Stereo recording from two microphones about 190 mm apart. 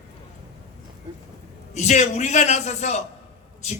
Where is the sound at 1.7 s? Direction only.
35° left (ahead or behind).